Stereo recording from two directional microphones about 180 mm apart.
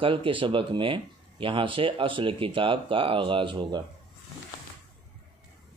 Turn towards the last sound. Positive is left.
turn(degrees=-25)  # may be behind; listen again after turning